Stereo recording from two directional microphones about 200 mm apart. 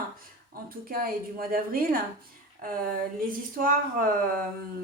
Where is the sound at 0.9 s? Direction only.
45° right (ahead or behind).